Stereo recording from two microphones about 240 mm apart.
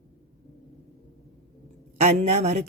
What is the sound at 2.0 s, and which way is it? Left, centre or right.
Speech, right.